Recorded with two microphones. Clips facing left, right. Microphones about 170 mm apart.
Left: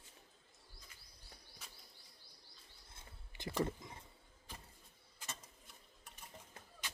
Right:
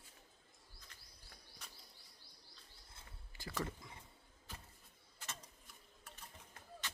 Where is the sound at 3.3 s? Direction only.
20° left (ahead or behind).